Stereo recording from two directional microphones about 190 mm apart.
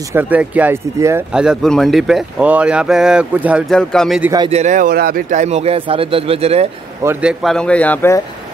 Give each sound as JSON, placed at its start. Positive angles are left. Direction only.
{"t": 0.1, "sound": "speech", "side_deg": -10}
{"t": 4.4, "sound": "speech", "side_deg": -35}
{"t": 7.0, "sound": "speech", "side_deg": -10}